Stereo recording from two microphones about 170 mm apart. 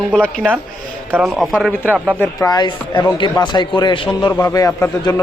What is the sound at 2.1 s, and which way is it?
Speech, 20° left (ahead or behind).